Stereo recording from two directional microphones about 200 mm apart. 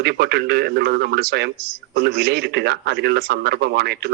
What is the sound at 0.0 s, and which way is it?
Speech, 55° right (ahead or behind).